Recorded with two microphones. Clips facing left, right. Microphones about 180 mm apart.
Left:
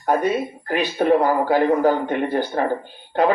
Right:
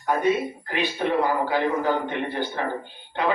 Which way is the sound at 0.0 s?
45° left (ahead or behind).